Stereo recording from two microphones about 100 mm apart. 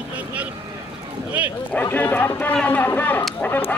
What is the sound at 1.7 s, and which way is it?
Speech, 15° left (ahead or behind).